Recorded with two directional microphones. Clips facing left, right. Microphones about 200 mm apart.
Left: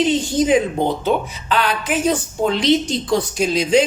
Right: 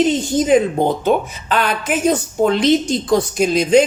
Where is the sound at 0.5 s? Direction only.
45° right (ahead or behind).